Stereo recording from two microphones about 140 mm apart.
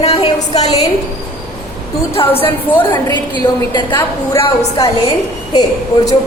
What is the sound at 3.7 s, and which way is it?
Speech, 30° left (ahead or behind).